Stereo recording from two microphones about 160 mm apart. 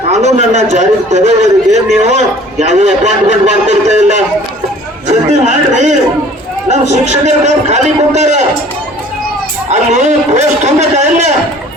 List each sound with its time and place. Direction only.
0.1 s a man's voice: 45° right (ahead or behind)
5.0 s a sound: 50° right (ahead or behind)
6.7 s a man's voice: 45° right (ahead or behind)
9.9 s a man's voice: 45° right (ahead or behind)